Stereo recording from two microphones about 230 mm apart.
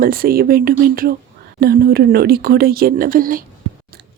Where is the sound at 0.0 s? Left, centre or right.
Right.